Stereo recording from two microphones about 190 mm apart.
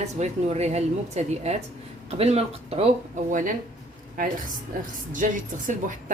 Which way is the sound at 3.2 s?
45° right (ahead or behind).